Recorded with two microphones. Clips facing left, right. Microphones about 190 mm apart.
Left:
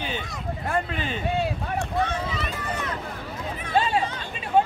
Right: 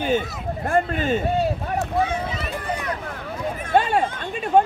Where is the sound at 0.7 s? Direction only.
45° right (ahead or behind).